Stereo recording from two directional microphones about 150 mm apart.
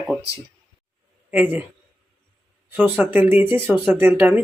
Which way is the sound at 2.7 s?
10° right (ahead or behind).